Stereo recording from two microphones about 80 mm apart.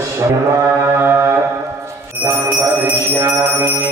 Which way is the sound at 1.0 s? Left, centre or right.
Right.